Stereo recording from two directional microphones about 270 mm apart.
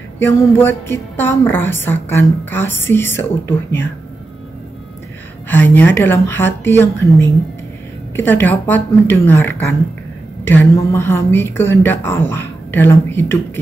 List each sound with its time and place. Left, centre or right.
0.2 s a woman's voice: centre
5.5 s a woman's voice: centre